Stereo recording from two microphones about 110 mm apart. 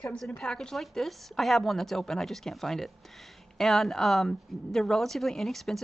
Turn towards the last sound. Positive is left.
turn(degrees=0)  # may be behind; listen again after turning